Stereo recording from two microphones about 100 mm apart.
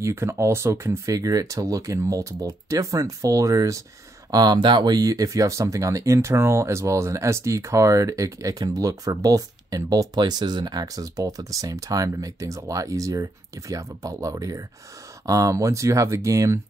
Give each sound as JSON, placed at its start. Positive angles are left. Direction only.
{"t": 0.0, "sound": "speech", "side_deg": -25}
{"t": 4.3, "sound": "speech", "side_deg": -45}